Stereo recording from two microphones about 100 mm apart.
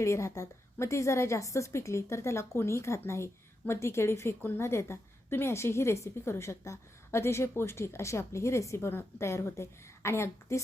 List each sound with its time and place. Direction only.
0.0 s a woman's voice: 30° left (ahead or behind)